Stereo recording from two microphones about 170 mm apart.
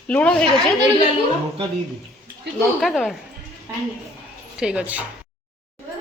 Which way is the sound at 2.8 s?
Centre (ahead or behind).